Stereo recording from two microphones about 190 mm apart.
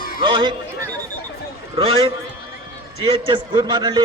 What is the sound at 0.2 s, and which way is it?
Speech, 25° right (ahead or behind).